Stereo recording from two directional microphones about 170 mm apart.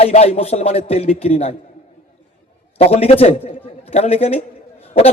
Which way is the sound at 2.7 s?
35° left (ahead or behind).